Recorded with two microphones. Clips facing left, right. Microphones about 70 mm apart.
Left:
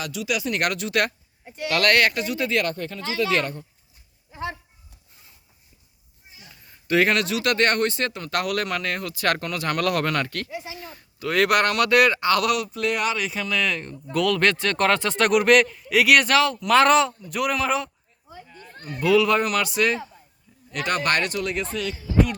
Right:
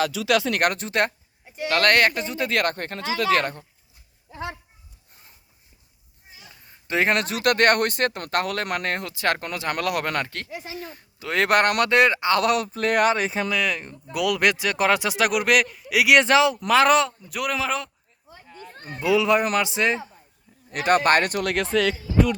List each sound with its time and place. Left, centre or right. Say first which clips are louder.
0.3 s speech: right 4 dB; right
0.5 s speech: right 1 dB; right
2.5 s speech: right 1 dB; right
3.2 s speech: right 4 dB; right
6.8 s speech: left 2 dB; right
8.4 s speech: even; right
13.5 s speech: even; centre
16.1 s speech: right 4 dB; right
16.6 s a man's voice: left 1 dB; centre
18.8 s speech: left 2 dB; right
20.7 s speech: right 5 dB; right
21.5 s speech: right 6 dB; right